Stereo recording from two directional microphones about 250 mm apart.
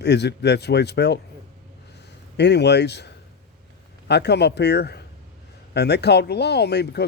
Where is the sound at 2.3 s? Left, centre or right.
Left.